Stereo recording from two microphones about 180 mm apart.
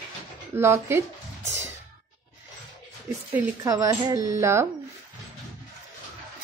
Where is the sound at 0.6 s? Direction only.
15° right (ahead or behind).